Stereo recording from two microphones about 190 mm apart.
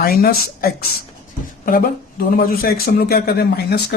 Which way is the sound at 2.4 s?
55° left (ahead or behind).